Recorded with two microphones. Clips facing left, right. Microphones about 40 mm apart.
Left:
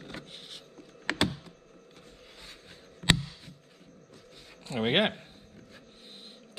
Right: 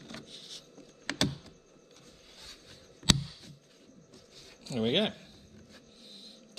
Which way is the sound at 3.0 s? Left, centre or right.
Left.